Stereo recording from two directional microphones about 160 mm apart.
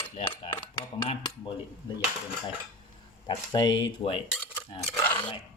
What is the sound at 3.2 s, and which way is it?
Speech, 25° left (ahead or behind).